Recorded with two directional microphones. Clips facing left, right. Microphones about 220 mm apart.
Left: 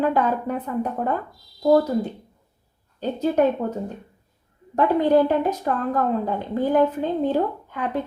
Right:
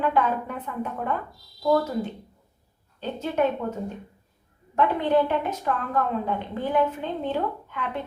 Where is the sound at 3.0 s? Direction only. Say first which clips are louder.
Left 6 dB; 40° left (ahead or behind).